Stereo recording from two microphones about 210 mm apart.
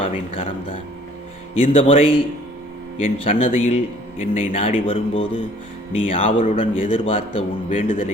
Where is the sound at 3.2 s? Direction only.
30° left (ahead or behind).